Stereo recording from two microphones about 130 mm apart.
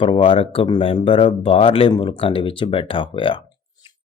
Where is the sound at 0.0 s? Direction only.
40° left (ahead or behind).